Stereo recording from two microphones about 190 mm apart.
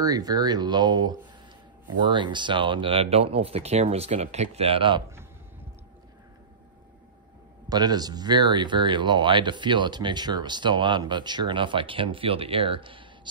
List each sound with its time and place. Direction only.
0.0 s speech: 20° right (ahead or behind)
7.7 s speech: 20° right (ahead or behind)